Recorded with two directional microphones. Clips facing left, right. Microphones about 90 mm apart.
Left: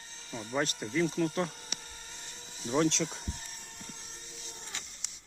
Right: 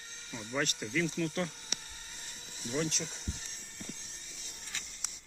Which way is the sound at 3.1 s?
50° left (ahead or behind).